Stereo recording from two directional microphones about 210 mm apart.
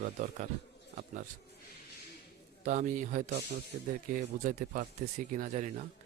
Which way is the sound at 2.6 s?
35° right (ahead or behind).